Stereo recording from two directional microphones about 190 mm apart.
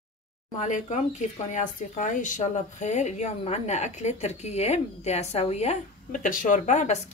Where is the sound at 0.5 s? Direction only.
40° left (ahead or behind).